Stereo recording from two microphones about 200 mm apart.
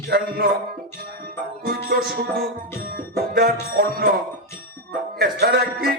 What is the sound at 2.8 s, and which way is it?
Music, 45° right (ahead or behind).